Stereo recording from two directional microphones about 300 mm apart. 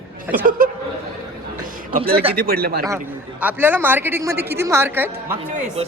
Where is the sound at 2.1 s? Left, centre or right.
Centre.